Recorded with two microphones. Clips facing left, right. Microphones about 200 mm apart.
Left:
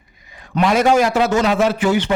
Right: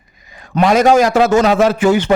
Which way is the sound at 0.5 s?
45° right (ahead or behind).